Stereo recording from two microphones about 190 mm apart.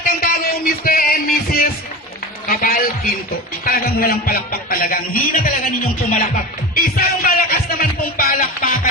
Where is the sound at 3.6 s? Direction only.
50° left (ahead or behind).